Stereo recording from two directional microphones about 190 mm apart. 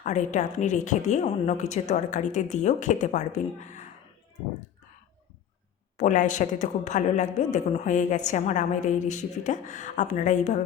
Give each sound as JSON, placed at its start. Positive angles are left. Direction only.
{"t": 0.0, "sound": "a woman's voice", "side_deg": 40}
{"t": 6.0, "sound": "a woman's voice", "side_deg": 40}